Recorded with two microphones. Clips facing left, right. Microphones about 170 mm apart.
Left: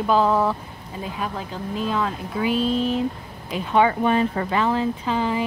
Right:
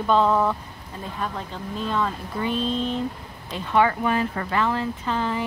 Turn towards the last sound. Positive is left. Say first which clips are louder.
# left 3 dB
turn(degrees=10)  # may be behind; listen again after turning